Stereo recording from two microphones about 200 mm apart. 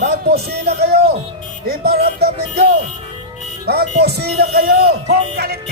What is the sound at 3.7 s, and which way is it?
Speech, 50° right (ahead or behind).